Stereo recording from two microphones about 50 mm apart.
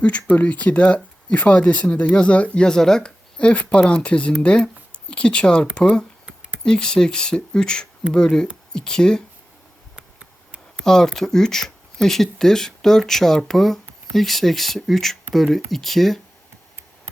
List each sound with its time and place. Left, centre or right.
0.0 s speech: left
9.9 s a sound: right
10.8 s speech: centre